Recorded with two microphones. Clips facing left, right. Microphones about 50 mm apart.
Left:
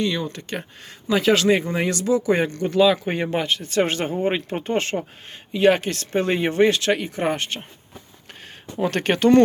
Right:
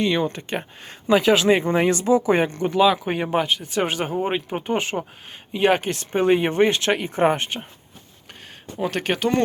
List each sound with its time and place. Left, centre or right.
0.0 s speech: right
1.1 s speech: centre
1.8 s speech: right
6.5 s speech: right
8.8 s speech: centre